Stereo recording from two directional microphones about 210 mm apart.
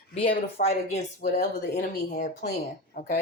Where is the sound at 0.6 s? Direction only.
35° left (ahead or behind).